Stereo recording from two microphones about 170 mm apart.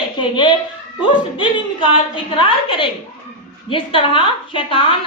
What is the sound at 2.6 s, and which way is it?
A woman's voice, 30° left (ahead or behind).